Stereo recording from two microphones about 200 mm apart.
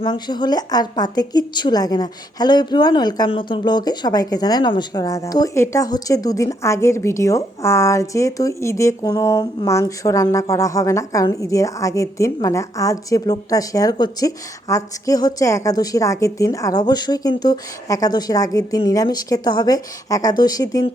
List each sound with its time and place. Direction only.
0.0 s a woman's voice: 20° left (ahead or behind)